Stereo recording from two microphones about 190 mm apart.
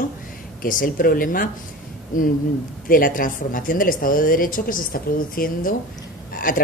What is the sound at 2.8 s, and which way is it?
Speech, 45° left (ahead or behind).